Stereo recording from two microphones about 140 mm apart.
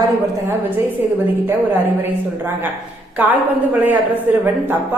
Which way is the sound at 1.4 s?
15° right (ahead or behind).